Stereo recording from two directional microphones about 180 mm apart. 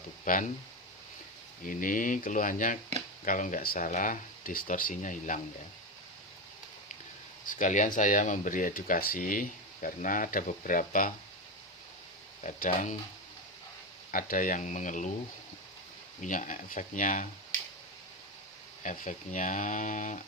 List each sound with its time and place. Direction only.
0.3 s speech: 50° left (ahead or behind)
1.6 s speech: 50° left (ahead or behind)
7.4 s speech: 45° left (ahead or behind)
12.4 s speech: 45° left (ahead or behind)
14.1 s speech: 50° left (ahead or behind)
16.2 s speech: 45° left (ahead or behind)
18.8 s speech: 45° left (ahead or behind)